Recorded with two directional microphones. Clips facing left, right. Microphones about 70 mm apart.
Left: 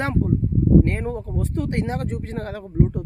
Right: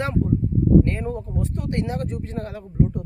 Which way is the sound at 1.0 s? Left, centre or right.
Left.